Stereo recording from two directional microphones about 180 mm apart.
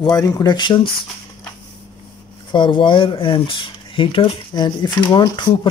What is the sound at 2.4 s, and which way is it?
Speech, 25° left (ahead or behind).